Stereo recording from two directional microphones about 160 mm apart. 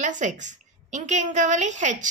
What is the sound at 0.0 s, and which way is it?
A woman's voice, 50° right (ahead or behind).